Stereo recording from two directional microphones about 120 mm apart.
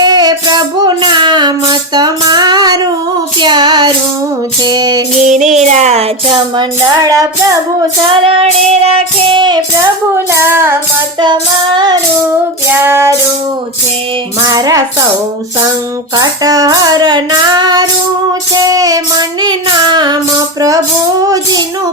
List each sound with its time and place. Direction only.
0.0 s music: 35° right (ahead or behind)
3.4 s child singing: 40° right (ahead or behind)
4.6 s female singing: 35° right (ahead or behind)
5.2 s music: 85° right; by 6.7 s 50° right (ahead or behind)
6.8 s music: 30° right (ahead or behind)
8.2 s music: 55° right (ahead or behind)
10.3 s music: 20° right (ahead or behind)
11.2 s female singing: 40° right (ahead or behind)
12.7 s music: 20° right (ahead or behind)
14.4 s female singing: 30° right (ahead or behind)
16.1 s female singing: 35° right (ahead or behind)
20.6 s music: 30° right (ahead or behind)
21.2 s female singing: 30° right (ahead or behind)